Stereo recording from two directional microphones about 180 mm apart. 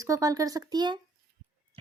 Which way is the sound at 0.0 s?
20° right (ahead or behind).